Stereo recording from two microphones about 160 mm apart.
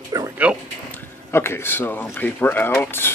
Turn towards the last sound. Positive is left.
turn(degrees=15)  # may be behind; listen again after turning